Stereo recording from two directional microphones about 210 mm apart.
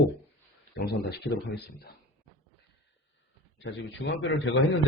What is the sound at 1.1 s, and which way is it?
Speech, 50° left (ahead or behind).